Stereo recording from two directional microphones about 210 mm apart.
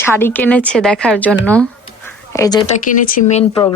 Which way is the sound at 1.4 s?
5° left (ahead or behind).